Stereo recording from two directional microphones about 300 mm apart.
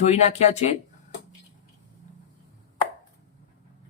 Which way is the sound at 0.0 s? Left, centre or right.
Left.